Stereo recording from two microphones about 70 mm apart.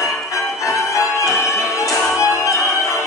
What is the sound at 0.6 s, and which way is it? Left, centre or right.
Music, left.